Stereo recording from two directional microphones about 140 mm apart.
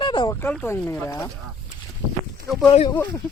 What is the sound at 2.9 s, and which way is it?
Speech, 15° left (ahead or behind).